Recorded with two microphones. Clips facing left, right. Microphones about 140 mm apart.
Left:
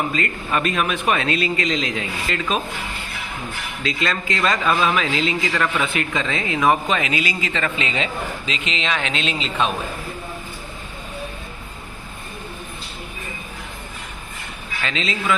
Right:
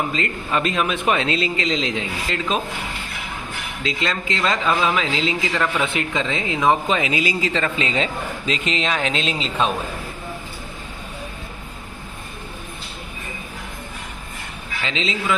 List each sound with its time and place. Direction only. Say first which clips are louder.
0.1 s a man's voice: even; 25° right (ahead or behind)
3.8 s a man's voice: left 1 dB; 20° right (ahead or behind)
14.8 s a man's voice: even; 20° right (ahead or behind)